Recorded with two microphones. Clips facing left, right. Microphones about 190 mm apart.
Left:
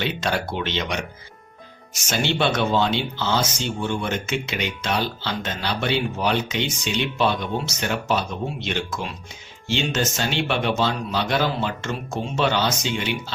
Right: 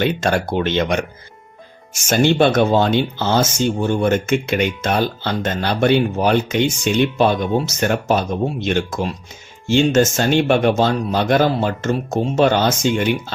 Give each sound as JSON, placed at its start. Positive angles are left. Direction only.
{"t": 0.0, "sound": "speech", "side_deg": -50}
{"t": 2.0, "sound": "speech", "side_deg": -50}